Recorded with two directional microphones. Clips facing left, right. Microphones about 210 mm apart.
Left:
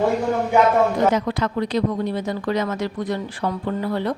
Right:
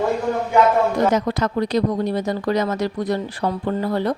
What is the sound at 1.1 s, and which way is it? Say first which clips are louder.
Speech: right 2 dB; 40° right (ahead or behind).